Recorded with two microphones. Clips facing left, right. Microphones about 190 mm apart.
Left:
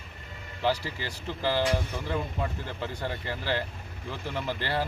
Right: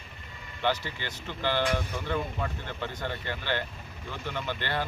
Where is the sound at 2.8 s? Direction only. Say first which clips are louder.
Left 1 dB; 35° left (ahead or behind).